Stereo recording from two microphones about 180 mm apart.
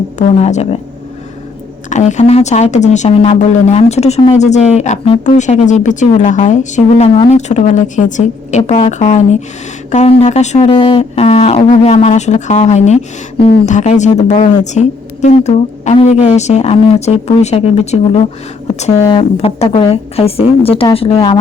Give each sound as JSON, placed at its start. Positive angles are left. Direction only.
{"t": 0.2, "sound": "speech", "side_deg": 40}
{"t": 1.9, "sound": "speech", "side_deg": 40}